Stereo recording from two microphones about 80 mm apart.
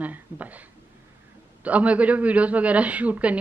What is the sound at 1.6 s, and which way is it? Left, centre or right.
A woman's voice, centre.